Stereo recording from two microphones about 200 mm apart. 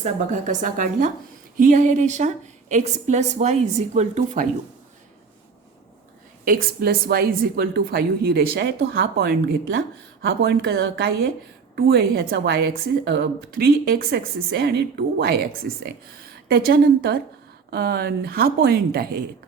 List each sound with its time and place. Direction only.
0.0 s a woman's voice: 40° right (ahead or behind)
6.4 s a woman's voice: 45° right (ahead or behind)